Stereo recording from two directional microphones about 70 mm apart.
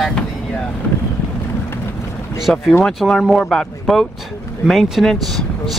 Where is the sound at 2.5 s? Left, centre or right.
Centre.